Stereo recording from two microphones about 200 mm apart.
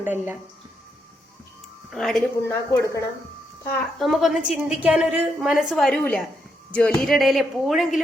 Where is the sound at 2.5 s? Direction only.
15° left (ahead or behind).